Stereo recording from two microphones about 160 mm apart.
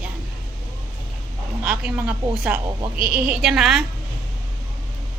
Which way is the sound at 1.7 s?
5° right (ahead or behind).